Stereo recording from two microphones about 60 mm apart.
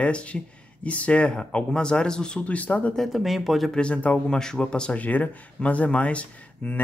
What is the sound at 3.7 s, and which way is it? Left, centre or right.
Speech, centre.